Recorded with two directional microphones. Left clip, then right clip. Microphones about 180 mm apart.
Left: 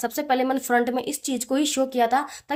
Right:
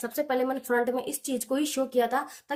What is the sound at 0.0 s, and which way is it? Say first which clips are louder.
Speech: left 4 dB; 45° left (ahead or behind).